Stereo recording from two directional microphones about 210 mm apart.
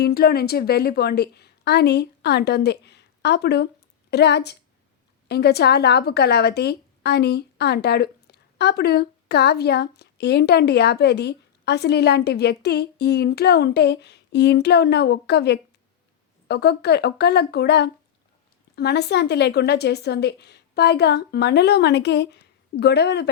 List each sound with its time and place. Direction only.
0.0 s a woman's voice: 50° left (ahead or behind)